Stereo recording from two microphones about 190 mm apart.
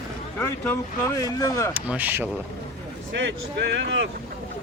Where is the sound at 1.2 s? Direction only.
20° left (ahead or behind).